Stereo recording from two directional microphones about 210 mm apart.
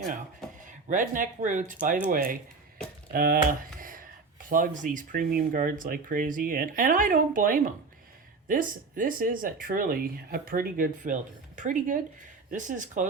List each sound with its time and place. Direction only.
0.6 s speech: 40° right (ahead or behind)